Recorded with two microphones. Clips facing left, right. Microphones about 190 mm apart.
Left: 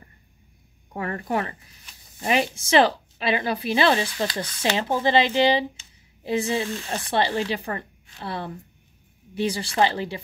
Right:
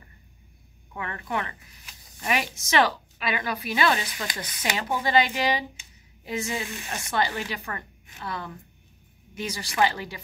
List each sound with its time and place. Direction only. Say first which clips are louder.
0.9 s a woman's voice: left 5 dB; 40° left (ahead or behind)